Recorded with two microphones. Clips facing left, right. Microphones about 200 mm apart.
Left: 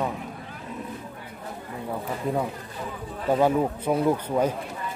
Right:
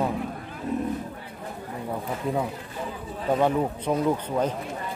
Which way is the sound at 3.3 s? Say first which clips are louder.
Left 2 dB; 5° left (ahead or behind).